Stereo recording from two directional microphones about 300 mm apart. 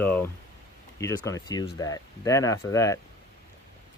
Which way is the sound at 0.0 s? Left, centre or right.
Centre.